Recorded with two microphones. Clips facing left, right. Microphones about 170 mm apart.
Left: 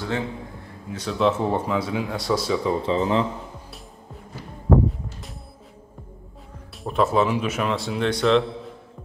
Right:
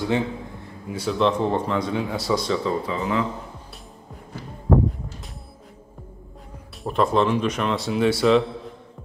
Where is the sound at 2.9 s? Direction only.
30° left (ahead or behind).